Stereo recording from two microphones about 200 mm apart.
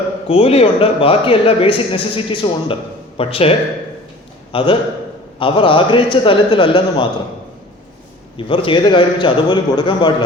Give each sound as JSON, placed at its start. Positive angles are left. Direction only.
{"t": 0.3, "sound": "speech", "side_deg": 30}
{"t": 4.5, "sound": "speech", "side_deg": 25}
{"t": 8.4, "sound": "speech", "side_deg": 25}